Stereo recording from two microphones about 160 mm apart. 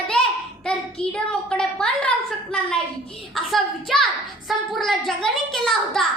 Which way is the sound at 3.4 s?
Centre (ahead or behind).